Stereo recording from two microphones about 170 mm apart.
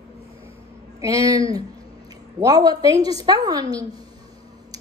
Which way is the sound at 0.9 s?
20° right (ahead or behind).